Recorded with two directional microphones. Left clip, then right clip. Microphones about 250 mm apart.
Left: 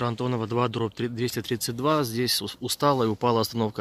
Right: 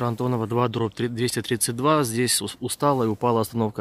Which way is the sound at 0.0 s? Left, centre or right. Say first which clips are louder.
Right 2 dB; centre.